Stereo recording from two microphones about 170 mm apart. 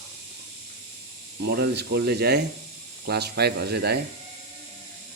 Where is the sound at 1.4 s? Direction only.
80° right.